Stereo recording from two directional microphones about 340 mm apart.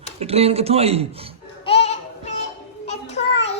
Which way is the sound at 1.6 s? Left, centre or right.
Centre.